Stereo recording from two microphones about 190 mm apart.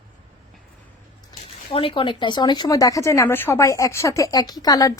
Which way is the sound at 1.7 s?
25° left (ahead or behind).